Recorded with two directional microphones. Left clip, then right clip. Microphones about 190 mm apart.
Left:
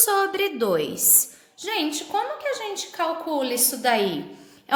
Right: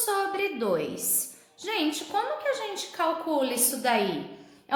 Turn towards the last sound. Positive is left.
turn(degrees=30)  # may be behind; listen again after turning